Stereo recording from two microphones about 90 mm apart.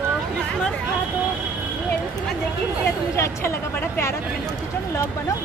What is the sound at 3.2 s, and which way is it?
Speech, 30° left (ahead or behind).